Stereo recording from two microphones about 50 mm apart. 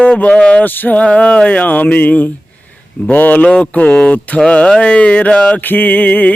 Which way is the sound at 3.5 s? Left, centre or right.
Left.